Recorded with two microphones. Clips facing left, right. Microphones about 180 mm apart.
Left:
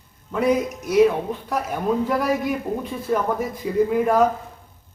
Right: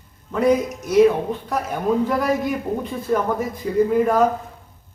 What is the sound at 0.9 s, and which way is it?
Speech, centre (ahead or behind).